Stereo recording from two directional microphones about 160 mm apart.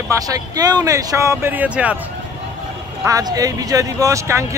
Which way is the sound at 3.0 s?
20° right (ahead or behind).